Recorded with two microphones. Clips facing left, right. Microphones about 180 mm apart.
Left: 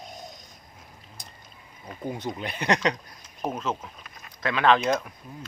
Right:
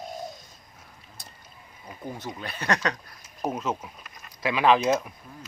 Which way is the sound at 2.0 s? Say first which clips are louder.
Left 4 dB; 15° left (ahead or behind).